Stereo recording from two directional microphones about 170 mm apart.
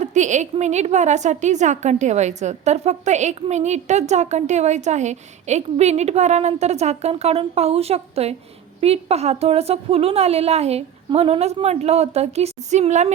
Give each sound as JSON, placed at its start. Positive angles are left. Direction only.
{"t": 0.0, "sound": "a woman's voice", "side_deg": -45}